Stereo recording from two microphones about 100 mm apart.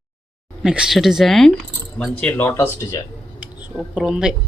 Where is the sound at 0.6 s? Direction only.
5° right (ahead or behind).